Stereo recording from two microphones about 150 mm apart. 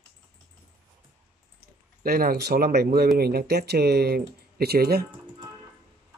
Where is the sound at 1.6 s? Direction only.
80° right.